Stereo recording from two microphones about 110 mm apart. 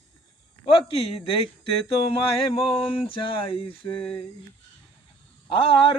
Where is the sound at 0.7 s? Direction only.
55° left (ahead or behind).